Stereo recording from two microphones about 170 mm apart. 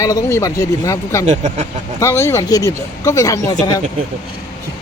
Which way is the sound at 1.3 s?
45° right (ahead or behind).